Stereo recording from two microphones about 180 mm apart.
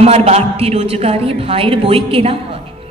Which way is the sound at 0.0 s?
35° right (ahead or behind).